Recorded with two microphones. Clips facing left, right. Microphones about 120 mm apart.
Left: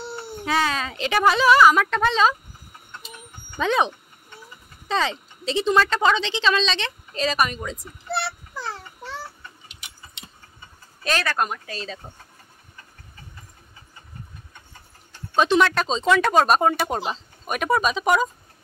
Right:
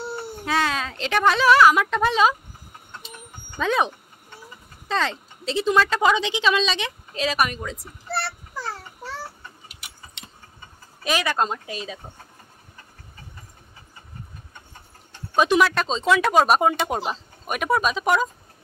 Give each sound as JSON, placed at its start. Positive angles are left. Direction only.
{"t": 0.5, "sound": "a woman's voice", "side_deg": 0}
{"t": 3.5, "sound": "a woman's voice", "side_deg": 0}
{"t": 8.1, "sound": "a sound", "side_deg": 0}
{"t": 11.1, "sound": "speech", "side_deg": -10}
{"t": 11.3, "sound": "speech", "side_deg": -25}
{"t": 15.3, "sound": "speech", "side_deg": -10}
{"t": 15.7, "sound": "a woman's voice", "side_deg": 0}